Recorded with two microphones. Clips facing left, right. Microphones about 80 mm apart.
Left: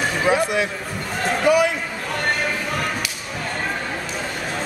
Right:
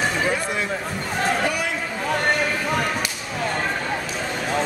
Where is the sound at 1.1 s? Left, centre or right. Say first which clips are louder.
Left 5 dB; centre.